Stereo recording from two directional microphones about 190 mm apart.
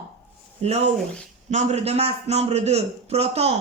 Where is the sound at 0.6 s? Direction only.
35° right (ahead or behind).